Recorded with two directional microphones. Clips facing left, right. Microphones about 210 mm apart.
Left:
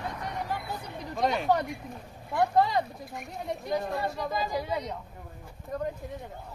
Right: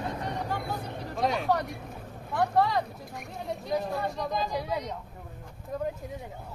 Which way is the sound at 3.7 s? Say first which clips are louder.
Right 1 dB; centre (ahead or behind).